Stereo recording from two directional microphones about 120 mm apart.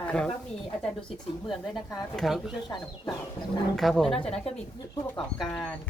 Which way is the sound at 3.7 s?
5° left (ahead or behind).